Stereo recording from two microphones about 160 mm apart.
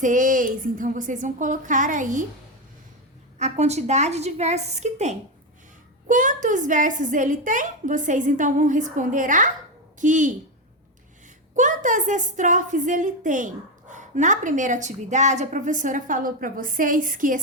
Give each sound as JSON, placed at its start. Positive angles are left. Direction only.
{"t": 0.0, "sound": "a woman's voice", "side_deg": -55}
{"t": 3.3, "sound": "a woman's voice", "side_deg": -45}
{"t": 11.5, "sound": "a woman's voice", "side_deg": -50}